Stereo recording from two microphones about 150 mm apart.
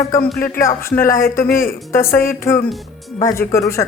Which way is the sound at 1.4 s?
70° left (ahead or behind).